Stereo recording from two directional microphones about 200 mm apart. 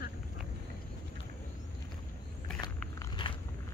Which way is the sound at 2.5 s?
20° left (ahead or behind).